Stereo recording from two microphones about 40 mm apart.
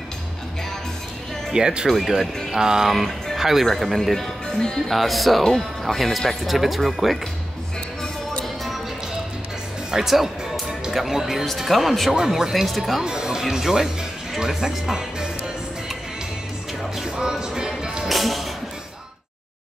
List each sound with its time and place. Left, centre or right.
1.5 s speech: right
3.7 s speech: centre
4.8 s speech: centre
8.0 s music: centre
9.9 s speech: centre
11.4 s speech: centre
12.1 s speech: centre
12.6 s speech: centre
13.0 s speech: centre
17.0 s music: centre
18.0 s music: centre